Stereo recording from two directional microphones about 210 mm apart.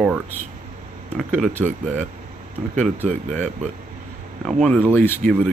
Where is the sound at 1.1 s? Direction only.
Centre (ahead or behind).